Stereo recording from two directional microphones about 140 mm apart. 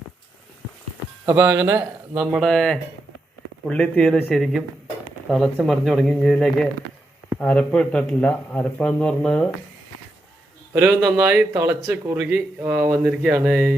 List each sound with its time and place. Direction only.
1.2 s speech: 15° right (ahead or behind)
2.3 s speech: centre (ahead or behind)
5.6 s speech: centre (ahead or behind)
10.8 s speech: 15° right (ahead or behind)
12.2 s speech: 10° right (ahead or behind)